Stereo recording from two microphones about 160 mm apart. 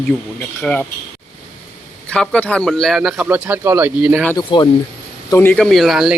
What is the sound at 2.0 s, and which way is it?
Speech, 5° left (ahead or behind).